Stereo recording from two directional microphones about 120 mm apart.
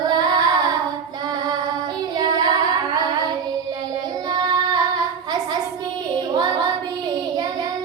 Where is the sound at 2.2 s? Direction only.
35° right (ahead or behind).